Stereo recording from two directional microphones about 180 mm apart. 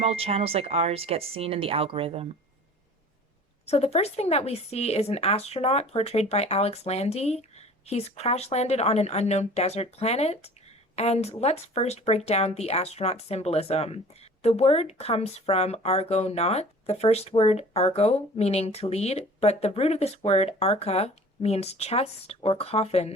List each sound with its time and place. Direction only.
0.0 s speech: 35° right (ahead or behind)
3.7 s speech: 35° left (ahead or behind)